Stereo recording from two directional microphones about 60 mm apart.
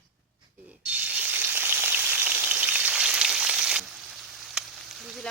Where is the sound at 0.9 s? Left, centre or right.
Right; by 3.8 s centre.